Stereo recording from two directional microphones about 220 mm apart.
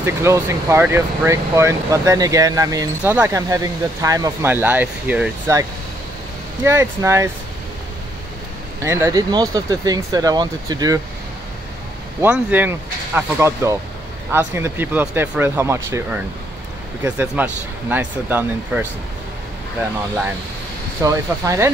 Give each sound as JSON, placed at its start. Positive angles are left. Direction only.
{"t": 0.0, "sound": "speech", "side_deg": -10}
{"t": 8.8, "sound": "speech", "side_deg": -10}
{"t": 12.2, "sound": "speech", "side_deg": -10}
{"t": 21.0, "sound": "speech", "side_deg": -15}